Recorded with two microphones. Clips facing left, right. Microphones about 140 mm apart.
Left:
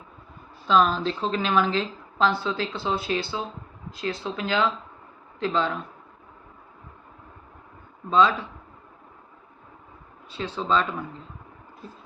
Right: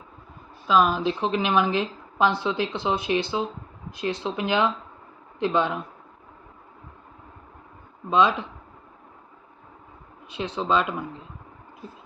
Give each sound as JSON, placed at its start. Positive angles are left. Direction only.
{"t": 0.7, "sound": "a woman's voice", "side_deg": -10}
{"t": 8.1, "sound": "a woman's voice", "side_deg": -15}
{"t": 10.2, "sound": "a woman's voice", "side_deg": -15}